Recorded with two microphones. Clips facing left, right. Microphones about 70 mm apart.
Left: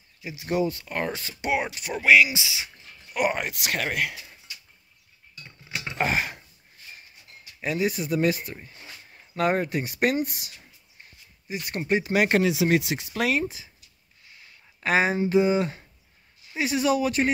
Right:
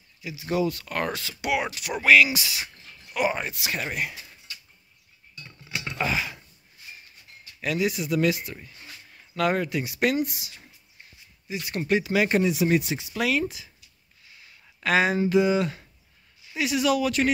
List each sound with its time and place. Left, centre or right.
0.5 s speech: left
0.7 s speech: centre
1.2 s speech: left
2.3 s speech: centre
3.2 s speech: left
5.9 s a sound: left
7.6 s speech: left
12.2 s speech: left
13.0 s speech: left
13.3 s speech: left
14.8 s speech: left